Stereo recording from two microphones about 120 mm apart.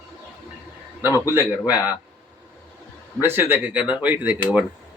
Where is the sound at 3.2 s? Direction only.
20° right (ahead or behind).